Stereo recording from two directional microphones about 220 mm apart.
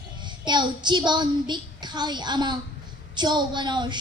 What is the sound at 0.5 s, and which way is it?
A child's voice, 20° right (ahead or behind).